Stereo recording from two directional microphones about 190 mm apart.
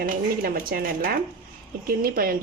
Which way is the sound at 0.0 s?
50° right (ahead or behind).